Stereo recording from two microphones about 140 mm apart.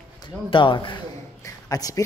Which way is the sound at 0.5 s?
35° left (ahead or behind).